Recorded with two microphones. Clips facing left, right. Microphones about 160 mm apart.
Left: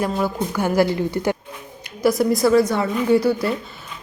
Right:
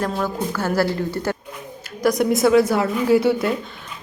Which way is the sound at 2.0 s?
5° left (ahead or behind).